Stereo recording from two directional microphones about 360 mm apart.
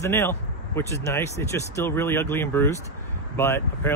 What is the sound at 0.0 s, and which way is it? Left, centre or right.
Speech, centre.